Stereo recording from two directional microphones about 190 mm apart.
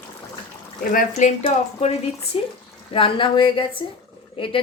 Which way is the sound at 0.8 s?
45° left (ahead or behind).